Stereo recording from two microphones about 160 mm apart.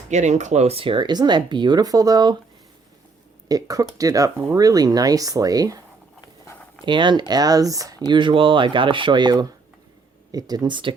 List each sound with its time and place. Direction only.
0.1 s speech: 45° right (ahead or behind); by 2.3 s 25° right (ahead or behind)
3.5 s speech: 20° right (ahead or behind)
6.8 s speech: 30° right (ahead or behind)